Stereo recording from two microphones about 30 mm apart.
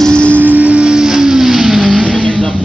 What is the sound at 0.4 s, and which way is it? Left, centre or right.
Music, right.